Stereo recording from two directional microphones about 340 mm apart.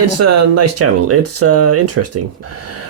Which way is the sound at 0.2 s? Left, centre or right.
Right.